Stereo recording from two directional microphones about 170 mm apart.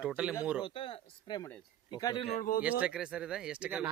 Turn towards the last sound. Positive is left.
turn(degrees=-5)  # may be behind; listen again after turning